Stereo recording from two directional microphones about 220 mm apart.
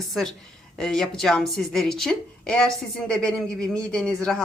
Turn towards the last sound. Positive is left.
turn(degrees=5)  # may be behind; listen again after turning